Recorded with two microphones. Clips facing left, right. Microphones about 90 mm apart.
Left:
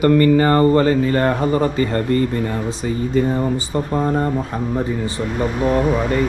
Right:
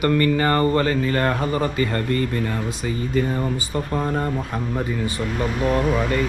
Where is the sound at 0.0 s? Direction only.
30° left (ahead or behind).